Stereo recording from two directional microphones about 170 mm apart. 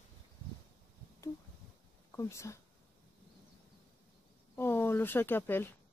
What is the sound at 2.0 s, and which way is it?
Speech, 15° left (ahead or behind).